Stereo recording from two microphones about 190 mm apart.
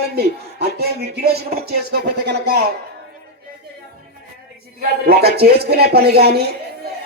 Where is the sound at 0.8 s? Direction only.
55° right (ahead or behind).